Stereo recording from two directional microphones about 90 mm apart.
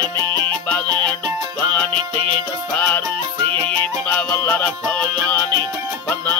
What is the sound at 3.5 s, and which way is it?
Music, 65° right (ahead or behind).